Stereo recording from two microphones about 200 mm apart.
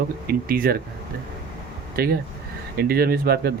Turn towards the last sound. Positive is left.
turn(degrees=-50)  # may be behind; listen again after turning